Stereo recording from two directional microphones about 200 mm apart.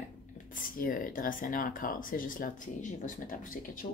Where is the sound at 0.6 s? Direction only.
45° left (ahead or behind).